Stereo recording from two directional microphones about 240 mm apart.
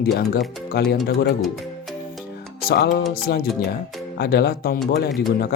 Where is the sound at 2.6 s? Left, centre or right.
Left.